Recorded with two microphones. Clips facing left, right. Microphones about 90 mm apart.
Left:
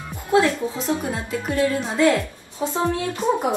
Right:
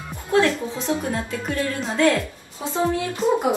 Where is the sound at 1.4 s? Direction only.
10° left (ahead or behind).